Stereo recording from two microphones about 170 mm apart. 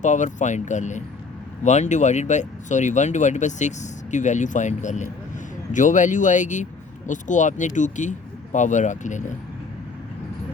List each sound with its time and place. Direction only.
0.0 s speech: 45° left (ahead or behind)